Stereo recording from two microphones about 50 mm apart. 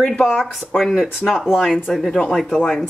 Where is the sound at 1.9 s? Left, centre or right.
Centre.